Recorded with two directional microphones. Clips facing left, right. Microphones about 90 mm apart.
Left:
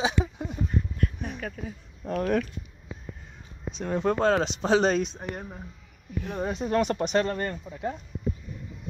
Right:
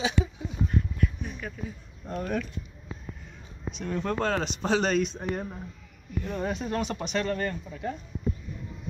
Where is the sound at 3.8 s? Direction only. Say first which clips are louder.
Left 4 dB; 25° left (ahead or behind).